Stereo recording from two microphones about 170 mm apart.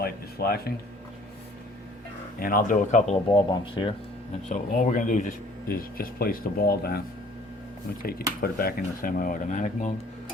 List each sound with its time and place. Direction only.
0.0 s a sound: 65° left (ahead or behind)
2.4 s speech: 55° left (ahead or behind)
3.2 s speech: 30° left (ahead or behind)
4.4 s speech: 45° left (ahead or behind); by 7.0 s 65° left (ahead or behind)
8.4 s speech: 60° left (ahead or behind)